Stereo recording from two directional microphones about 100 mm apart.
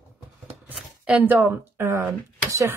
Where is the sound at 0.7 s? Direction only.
10° right (ahead or behind).